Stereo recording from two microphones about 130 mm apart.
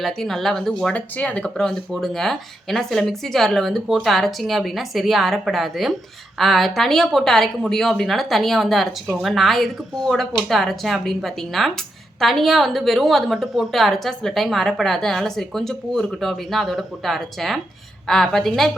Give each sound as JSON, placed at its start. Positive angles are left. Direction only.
{"t": 0.0, "sound": "a woman's voice", "side_deg": 0}